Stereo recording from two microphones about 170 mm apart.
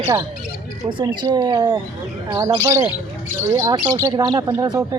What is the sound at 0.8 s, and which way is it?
Speech, 30° right (ahead or behind).